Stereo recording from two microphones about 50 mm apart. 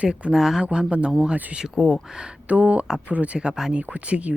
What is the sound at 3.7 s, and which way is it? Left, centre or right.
Speech, right.